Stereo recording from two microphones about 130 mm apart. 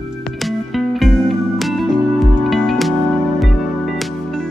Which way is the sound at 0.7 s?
Centre (ahead or behind).